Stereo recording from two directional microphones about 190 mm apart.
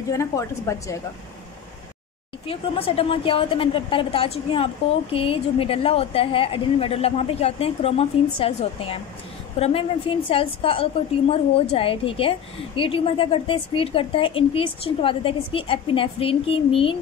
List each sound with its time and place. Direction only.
0.1 s a woman's voice: 15° left (ahead or behind)
2.4 s a woman's voice: 30° left (ahead or behind)